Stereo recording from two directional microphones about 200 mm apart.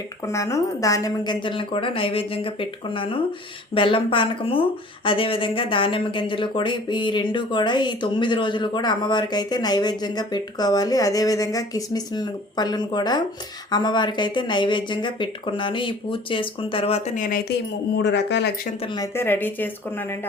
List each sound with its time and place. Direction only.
0.3 s speech: 15° left (ahead or behind); by 17.2 s 30° left (ahead or behind)
17.9 s speech: 60° left (ahead or behind)
19.1 s speech: 10° left (ahead or behind)